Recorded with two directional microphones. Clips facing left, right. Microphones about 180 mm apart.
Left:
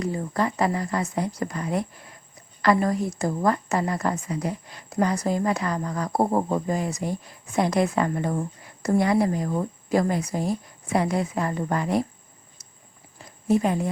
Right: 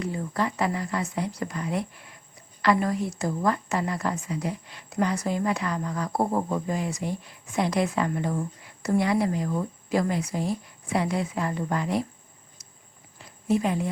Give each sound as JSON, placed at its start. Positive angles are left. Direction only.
{"t": 0.0, "sound": "a woman's voice", "side_deg": 40}
{"t": 13.5, "sound": "a woman's voice", "side_deg": 40}